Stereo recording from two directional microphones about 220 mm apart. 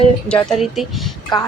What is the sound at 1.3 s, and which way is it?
Speech, 20° left (ahead or behind).